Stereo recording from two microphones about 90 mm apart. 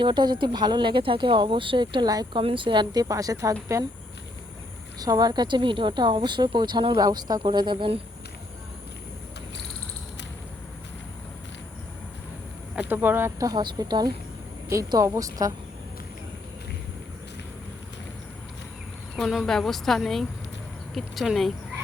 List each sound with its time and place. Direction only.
0.0 s a woman's voice: 55° right (ahead or behind)
2.3 s a woman's voice: 75° right (ahead or behind)
2.9 s speech: 40° right (ahead or behind)
4.9 s a woman's voice: 45° right (ahead or behind); by 8.0 s 75° right (ahead or behind)
12.7 s speech: 20° right (ahead or behind)
13.6 s speech: 50° right (ahead or behind)
15.0 s speech: 40° right (ahead or behind)
19.1 s speech: centre (ahead or behind)